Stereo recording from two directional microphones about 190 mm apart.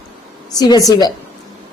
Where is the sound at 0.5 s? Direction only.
20° left (ahead or behind).